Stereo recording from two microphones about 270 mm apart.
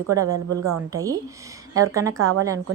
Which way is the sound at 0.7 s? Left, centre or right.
Centre.